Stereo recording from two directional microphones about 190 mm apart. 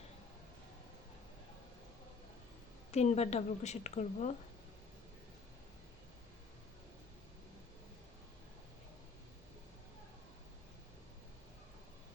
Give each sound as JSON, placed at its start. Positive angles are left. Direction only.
{"t": 2.9, "sound": "a woman's voice", "side_deg": 35}